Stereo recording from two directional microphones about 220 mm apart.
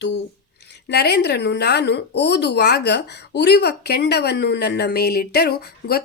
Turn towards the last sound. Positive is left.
turn(degrees=45)  # may be behind; listen again after turning